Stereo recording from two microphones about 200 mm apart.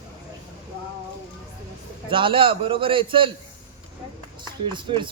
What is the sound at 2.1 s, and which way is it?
Speech, 25° right (ahead or behind).